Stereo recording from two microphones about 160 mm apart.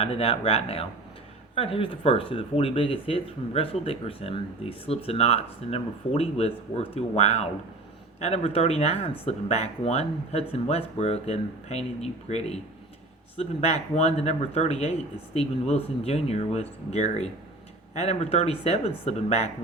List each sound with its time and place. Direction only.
0.0 s speech: 40° left (ahead or behind)